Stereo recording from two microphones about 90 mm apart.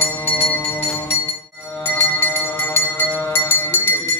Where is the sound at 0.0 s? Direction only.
20° left (ahead or behind).